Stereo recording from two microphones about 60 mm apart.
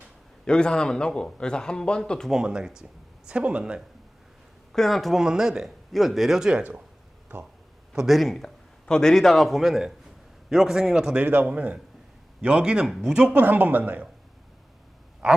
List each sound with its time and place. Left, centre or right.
0.4 s a man's voice: centre
2.3 s a man's voice: centre
4.7 s a man's voice: centre
5.2 s a man's voice: centre
6.6 s speech: right
7.9 s a man's voice: centre
11.2 s a man's voice: right
13.3 s speech: right